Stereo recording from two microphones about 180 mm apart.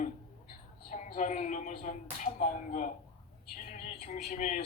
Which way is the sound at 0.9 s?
45° left (ahead or behind).